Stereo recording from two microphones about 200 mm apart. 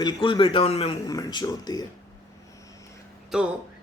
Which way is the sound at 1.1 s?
20° left (ahead or behind).